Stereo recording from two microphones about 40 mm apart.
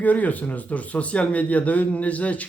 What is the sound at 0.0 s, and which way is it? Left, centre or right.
Speech, left.